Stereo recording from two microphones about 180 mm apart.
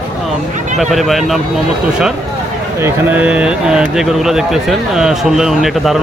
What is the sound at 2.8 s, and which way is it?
Speech, 10° right (ahead or behind).